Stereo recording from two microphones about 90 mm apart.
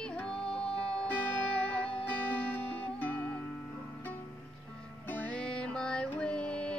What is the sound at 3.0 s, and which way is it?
Music, 15° left (ahead or behind).